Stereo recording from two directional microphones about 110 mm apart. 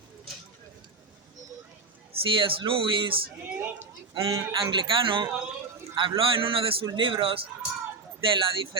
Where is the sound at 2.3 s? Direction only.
50° right (ahead or behind).